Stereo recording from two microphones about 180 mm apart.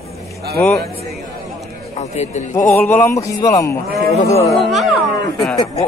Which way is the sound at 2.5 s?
10° left (ahead or behind).